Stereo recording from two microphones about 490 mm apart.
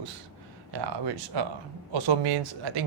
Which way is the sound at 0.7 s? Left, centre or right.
Right.